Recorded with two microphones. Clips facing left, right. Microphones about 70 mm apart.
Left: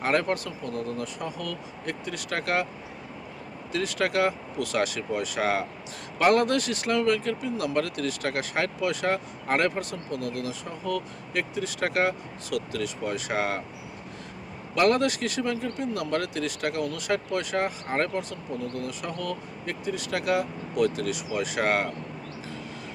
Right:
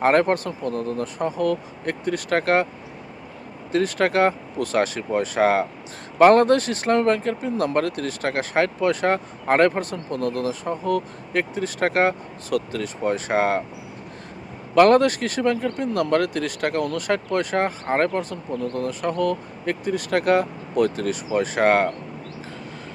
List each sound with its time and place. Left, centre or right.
0.0 s speech: right
3.7 s speech: right
14.8 s speech: right